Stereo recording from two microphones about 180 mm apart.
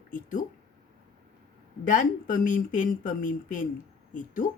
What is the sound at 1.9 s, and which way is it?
Speech, 50° left (ahead or behind).